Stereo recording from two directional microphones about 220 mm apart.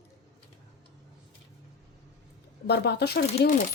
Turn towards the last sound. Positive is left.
turn(degrees=45)  # may be behind; listen again after turning